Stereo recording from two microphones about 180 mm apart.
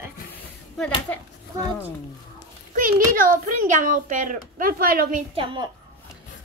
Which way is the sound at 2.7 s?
50° right (ahead or behind).